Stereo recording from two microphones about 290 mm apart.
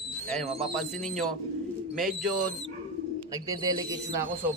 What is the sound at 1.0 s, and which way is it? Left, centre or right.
A man's voice, centre.